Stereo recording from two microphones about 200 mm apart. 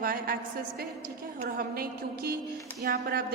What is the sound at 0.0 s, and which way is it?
Speech, 45° right (ahead or behind).